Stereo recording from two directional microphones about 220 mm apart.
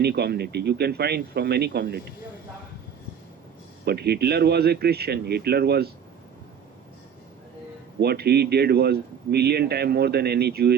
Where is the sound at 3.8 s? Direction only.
45° right (ahead or behind).